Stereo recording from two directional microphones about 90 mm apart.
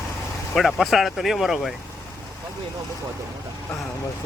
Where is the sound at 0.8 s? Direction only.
Centre (ahead or behind).